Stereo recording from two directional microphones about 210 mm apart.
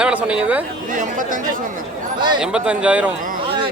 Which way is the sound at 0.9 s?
40° right (ahead or behind).